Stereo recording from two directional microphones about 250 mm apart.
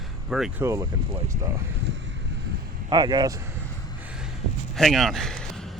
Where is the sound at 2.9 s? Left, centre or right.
Centre.